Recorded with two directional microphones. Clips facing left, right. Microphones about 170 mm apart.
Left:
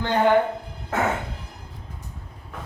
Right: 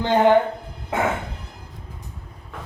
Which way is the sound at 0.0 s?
20° right (ahead or behind).